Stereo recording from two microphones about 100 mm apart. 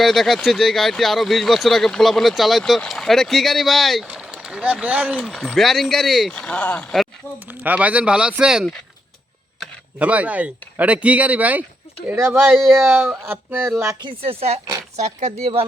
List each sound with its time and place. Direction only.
0.0 s speech: centre (ahead or behind)
4.0 s speech: 10° right (ahead or behind)
5.2 s speech: 5° right (ahead or behind); by 6.8 s 10° left (ahead or behind)
7.6 s speech: 15° right (ahead or behind)
10.0 s speech: 15° right (ahead or behind)
12.5 s speech: centre (ahead or behind)
12.9 s speech: 20° right (ahead or behind)
14.2 s speech: 80° right